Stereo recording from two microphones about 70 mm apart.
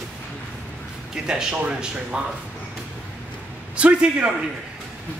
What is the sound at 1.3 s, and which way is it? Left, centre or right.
Speech, centre.